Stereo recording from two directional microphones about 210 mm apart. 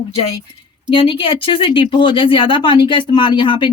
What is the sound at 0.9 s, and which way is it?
A woman's voice, 25° left (ahead or behind).